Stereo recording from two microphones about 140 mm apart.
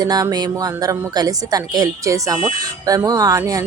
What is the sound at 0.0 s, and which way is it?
A woman's voice, 25° right (ahead or behind).